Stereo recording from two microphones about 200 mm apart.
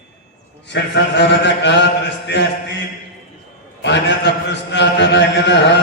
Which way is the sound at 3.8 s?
60° left (ahead or behind).